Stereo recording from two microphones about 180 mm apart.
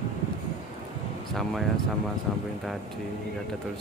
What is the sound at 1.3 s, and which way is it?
Speech, centre (ahead or behind).